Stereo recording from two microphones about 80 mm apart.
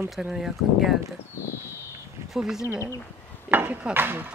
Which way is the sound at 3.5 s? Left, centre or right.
Right.